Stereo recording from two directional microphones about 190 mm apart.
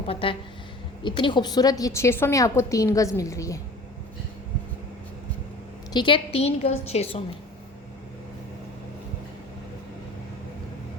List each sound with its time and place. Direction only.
0.1 s a woman's voice: 30° left (ahead or behind)
5.9 s a woman's voice: 25° left (ahead or behind)